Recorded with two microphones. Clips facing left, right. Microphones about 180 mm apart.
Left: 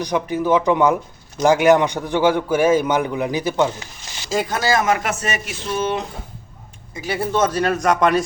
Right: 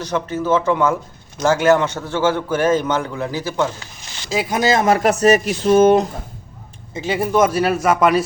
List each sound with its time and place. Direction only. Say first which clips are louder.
0.0 s a man's voice: left 1 dB; 15° left (ahead or behind)
4.3 s speech: even; 5° right (ahead or behind)
4.5 s a man's voice: right 4 dB; 20° right (ahead or behind); by 6.1 s 45° right (ahead or behind)
6.9 s speech: right 4 dB; 20° right (ahead or behind); by 8.2 s 5° right (ahead or behind)